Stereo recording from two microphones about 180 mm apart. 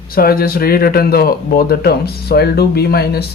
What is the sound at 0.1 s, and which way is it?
Speech, 55° left (ahead or behind).